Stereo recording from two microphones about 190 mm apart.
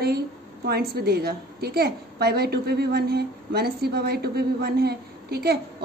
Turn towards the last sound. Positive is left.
turn(degrees=-55)  # may be behind; listen again after turning